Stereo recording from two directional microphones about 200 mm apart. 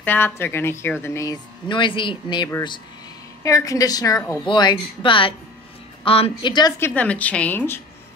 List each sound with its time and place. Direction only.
0.0 s a woman's voice: 10° left (ahead or behind)
7.0 s a woman's voice: 5° left (ahead or behind)